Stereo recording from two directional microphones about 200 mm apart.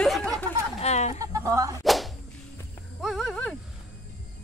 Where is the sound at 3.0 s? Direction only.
Centre (ahead or behind).